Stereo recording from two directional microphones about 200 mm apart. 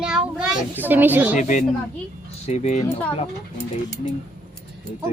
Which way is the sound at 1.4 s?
40° left (ahead or behind).